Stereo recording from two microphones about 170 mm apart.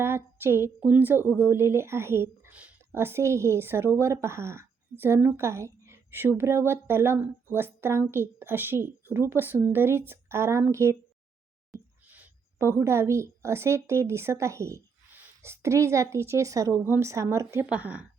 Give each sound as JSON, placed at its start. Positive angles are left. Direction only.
{"t": 0.0, "sound": "a woman's voice", "side_deg": -15}
{"t": 12.0, "sound": "a woman's voice", "side_deg": -10}